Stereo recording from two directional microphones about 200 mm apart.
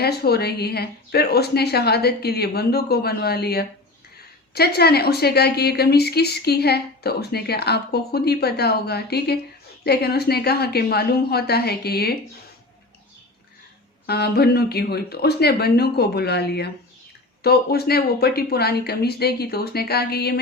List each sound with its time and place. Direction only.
0.0 s a woman's voice: 50° left (ahead or behind)
14.1 s a woman's voice: 55° left (ahead or behind)